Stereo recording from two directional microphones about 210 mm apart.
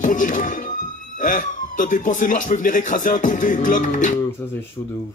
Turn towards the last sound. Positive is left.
turn(degrees=35)  # may be behind; listen again after turning